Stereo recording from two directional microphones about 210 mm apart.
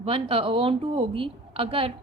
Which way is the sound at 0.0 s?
25° right (ahead or behind).